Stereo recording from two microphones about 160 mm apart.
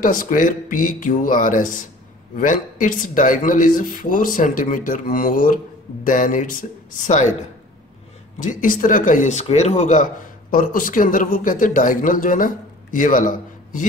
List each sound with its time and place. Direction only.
0.0 s speech: 60° left (ahead or behind)
8.4 s speech: 55° left (ahead or behind)